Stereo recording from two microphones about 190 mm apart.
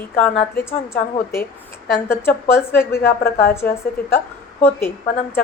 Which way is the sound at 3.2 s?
55° left (ahead or behind).